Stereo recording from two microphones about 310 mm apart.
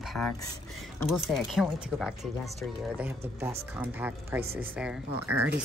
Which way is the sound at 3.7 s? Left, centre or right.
Centre.